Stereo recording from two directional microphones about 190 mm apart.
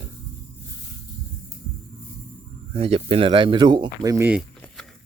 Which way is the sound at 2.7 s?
30° right (ahead or behind).